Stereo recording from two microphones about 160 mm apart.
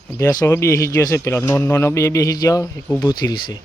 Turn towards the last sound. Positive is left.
turn(degrees=25)  # may be behind; listen again after turning